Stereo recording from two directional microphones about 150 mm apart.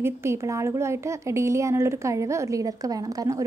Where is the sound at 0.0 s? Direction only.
20° right (ahead or behind).